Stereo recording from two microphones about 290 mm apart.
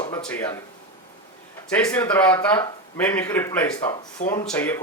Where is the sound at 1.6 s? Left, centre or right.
Centre.